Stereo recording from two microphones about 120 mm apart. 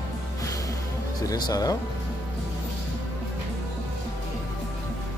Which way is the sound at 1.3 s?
35° left (ahead or behind).